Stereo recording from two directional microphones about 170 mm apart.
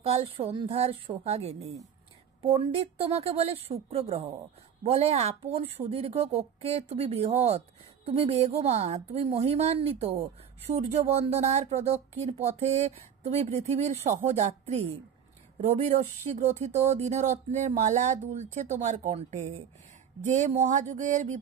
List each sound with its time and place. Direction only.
0.0 s speech: 35° right (ahead or behind)
16.3 s speech: 40° right (ahead or behind)